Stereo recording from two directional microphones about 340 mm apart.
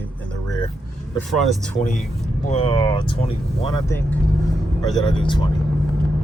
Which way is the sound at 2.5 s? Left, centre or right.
Centre.